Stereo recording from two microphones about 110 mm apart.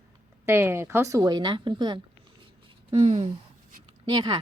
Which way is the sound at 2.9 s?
80° right.